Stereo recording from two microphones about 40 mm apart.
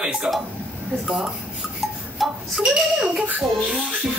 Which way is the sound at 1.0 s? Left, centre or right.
Right.